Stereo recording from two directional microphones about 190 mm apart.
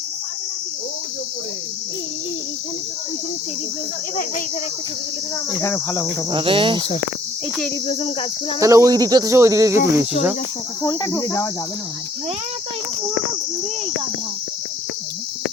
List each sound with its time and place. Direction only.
5.5 s cricket: 15° left (ahead or behind)
6.3 s cricket: 25° right (ahead or behind)
7.9 s cricket: 30° left (ahead or behind)
8.6 s speech: 15° right (ahead or behind)
10.8 s cricket: 15° left (ahead or behind)